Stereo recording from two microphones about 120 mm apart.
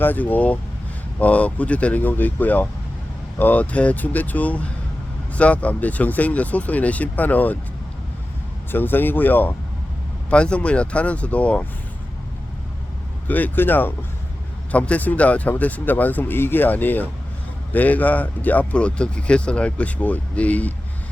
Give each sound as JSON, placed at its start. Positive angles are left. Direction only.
{"t": 0.0, "sound": "speech", "side_deg": 15}
{"t": 8.7, "sound": "speech", "side_deg": 15}
{"t": 13.2, "sound": "speech", "side_deg": 15}